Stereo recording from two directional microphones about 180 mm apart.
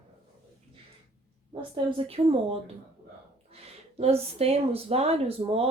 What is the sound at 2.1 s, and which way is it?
Speech, 30° right (ahead or behind).